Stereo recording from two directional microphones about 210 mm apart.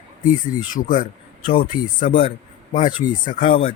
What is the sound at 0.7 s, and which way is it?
Speech, 40° left (ahead or behind).